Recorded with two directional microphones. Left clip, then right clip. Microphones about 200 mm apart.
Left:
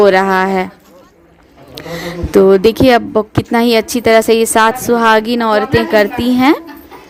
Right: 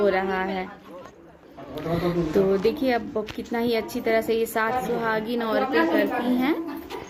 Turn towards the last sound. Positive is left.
turn(degrees=50)  # may be behind; listen again after turning